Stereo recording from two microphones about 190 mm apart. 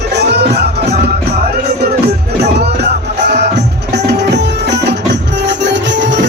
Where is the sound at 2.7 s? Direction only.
60° right (ahead or behind).